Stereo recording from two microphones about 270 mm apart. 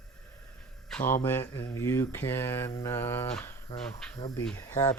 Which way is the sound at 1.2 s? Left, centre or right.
Centre.